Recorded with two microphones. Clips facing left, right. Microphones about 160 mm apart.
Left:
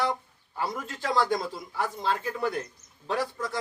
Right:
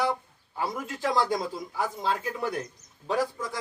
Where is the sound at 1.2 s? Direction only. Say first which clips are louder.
Even; centre (ahead or behind).